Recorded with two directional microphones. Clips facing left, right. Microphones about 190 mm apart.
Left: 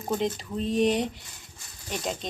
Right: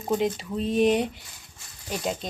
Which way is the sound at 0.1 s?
Centre (ahead or behind).